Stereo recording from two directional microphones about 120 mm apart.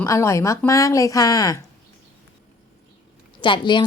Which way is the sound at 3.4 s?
40° left (ahead or behind).